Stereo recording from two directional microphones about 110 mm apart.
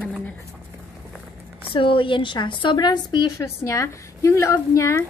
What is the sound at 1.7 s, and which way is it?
A woman's voice, 50° left (ahead or behind).